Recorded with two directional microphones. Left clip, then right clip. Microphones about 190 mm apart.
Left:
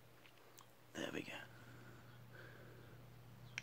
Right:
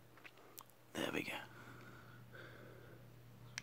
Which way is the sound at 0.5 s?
20° right (ahead or behind).